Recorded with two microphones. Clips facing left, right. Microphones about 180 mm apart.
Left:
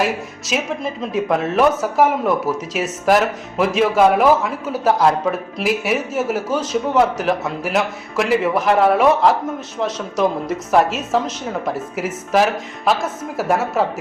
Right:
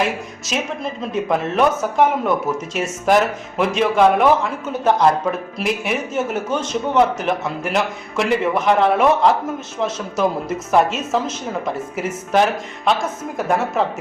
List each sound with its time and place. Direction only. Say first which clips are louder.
0.0 s speech: left 1 dB; centre (ahead or behind)